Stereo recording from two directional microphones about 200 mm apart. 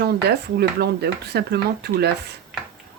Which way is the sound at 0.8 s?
55° right (ahead or behind).